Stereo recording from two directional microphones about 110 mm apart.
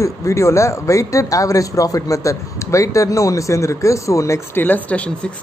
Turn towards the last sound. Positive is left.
turn(degrees=15)  # may be behind; listen again after turning